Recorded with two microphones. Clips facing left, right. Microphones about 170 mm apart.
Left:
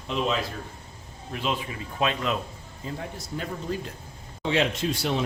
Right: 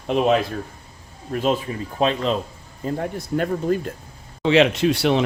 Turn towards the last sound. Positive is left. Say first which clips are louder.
# right 8 dB
turn(degrees=-70)  # may be behind; listen again after turning